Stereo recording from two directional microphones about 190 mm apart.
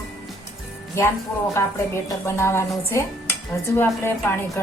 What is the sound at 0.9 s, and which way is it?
A woman's voice, 15° left (ahead or behind).